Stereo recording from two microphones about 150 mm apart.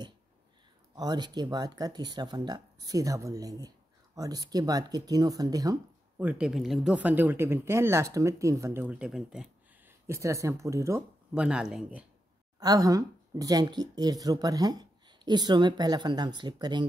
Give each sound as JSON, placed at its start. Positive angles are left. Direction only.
{"t": 0.9, "sound": "speech", "side_deg": -25}
{"t": 6.1, "sound": "speech", "side_deg": -10}
{"t": 9.8, "sound": "speech", "side_deg": -20}
{"t": 11.3, "sound": "speech", "side_deg": -5}
{"t": 12.5, "sound": "speech", "side_deg": -25}